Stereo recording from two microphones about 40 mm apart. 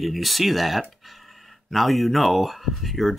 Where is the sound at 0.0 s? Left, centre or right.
Centre.